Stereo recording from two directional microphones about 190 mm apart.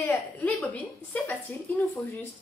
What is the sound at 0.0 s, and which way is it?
A woman's voice, 10° left (ahead or behind).